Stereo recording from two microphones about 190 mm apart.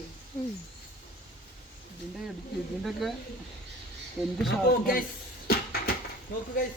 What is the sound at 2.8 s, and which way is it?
Speech, centre (ahead or behind).